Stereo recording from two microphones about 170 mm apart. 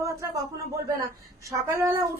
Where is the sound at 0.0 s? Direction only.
20° right (ahead or behind).